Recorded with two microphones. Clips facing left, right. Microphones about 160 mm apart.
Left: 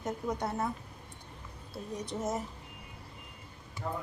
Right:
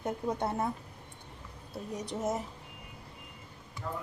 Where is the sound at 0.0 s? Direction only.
25° right (ahead or behind).